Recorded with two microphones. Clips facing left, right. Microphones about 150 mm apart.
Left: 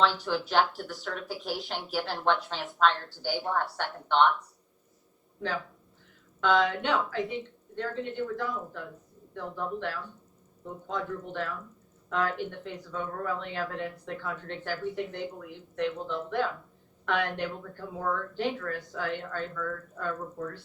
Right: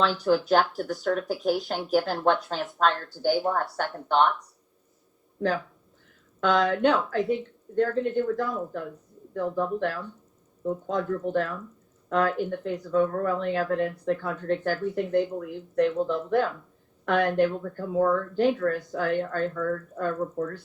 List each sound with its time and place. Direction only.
0.0 s speech: 45° right (ahead or behind)
6.4 s speech: 45° right (ahead or behind)